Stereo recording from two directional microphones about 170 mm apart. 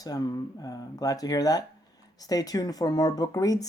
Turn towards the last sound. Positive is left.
turn(degrees=20)  # may be behind; listen again after turning